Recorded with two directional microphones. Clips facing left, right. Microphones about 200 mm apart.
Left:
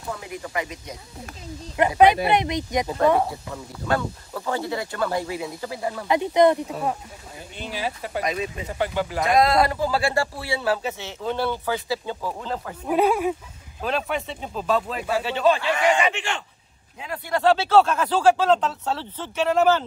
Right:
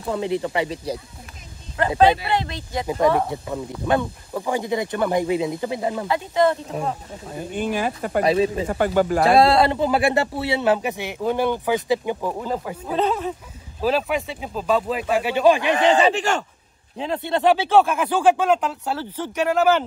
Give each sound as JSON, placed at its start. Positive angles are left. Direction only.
{"t": 0.1, "sound": "speech", "side_deg": -30}
{"t": 1.8, "sound": "speech", "side_deg": 15}
{"t": 3.3, "sound": "speech", "side_deg": -20}
{"t": 6.0, "sound": "speech", "side_deg": 20}
{"t": 7.3, "sound": "speech", "side_deg": -50}
{"t": 8.2, "sound": "speech", "side_deg": -30}
{"t": 8.6, "sound": "speech", "side_deg": -50}
{"t": 9.2, "sound": "speech", "side_deg": -30}
{"t": 12.8, "sound": "speech", "side_deg": 10}
{"t": 13.8, "sound": "speech", "side_deg": -5}
{"t": 15.9, "sound": "speech", "side_deg": -35}
{"t": 17.0, "sound": "speech", "side_deg": -25}